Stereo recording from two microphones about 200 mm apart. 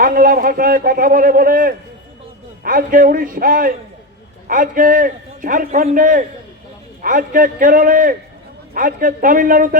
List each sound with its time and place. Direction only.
0.0 s a man's voice: 45° right (ahead or behind)